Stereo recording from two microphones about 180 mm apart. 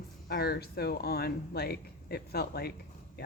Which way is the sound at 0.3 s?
55° left (ahead or behind).